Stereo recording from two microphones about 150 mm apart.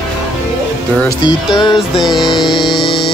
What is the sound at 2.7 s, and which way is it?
Music, centre (ahead or behind).